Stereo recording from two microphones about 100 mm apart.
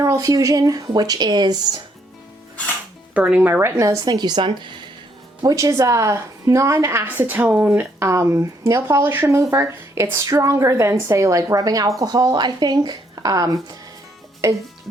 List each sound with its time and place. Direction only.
0.0 s speech: 35° right (ahead or behind)
3.2 s a woman's voice: 15° right (ahead or behind)
3.8 s a woman's voice: 40° right (ahead or behind)
5.4 s a woman's voice: 40° right (ahead or behind); by 7.9 s 15° right (ahead or behind)
7.9 s speech: 30° right (ahead or behind)
14.4 s a woman's voice: 30° right (ahead or behind)